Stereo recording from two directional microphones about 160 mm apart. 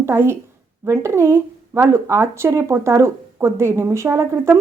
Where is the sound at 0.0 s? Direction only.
15° right (ahead or behind).